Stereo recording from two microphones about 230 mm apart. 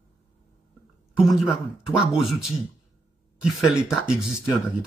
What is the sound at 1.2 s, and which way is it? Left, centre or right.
Speech, centre.